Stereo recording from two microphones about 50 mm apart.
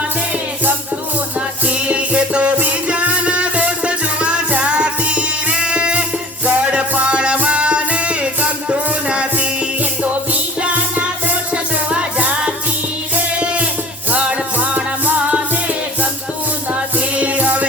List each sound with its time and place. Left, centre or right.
1.6 s music: right
10.6 s music: right
13.3 s a sound: right
14.1 s music: right
17.2 s music: right